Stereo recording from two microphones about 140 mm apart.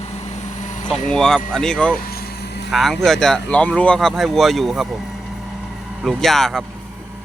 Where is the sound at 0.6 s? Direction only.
60° left (ahead or behind).